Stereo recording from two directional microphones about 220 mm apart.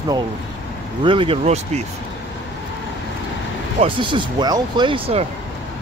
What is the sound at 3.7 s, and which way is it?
Speech, 25° right (ahead or behind).